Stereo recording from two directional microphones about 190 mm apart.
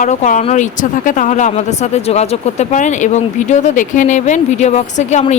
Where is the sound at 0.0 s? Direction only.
40° left (ahead or behind).